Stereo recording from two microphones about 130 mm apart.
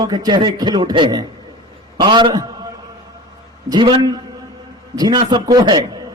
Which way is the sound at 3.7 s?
35° right (ahead or behind).